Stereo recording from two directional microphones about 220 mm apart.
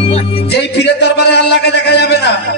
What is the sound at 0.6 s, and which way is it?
Speech, 50° left (ahead or behind).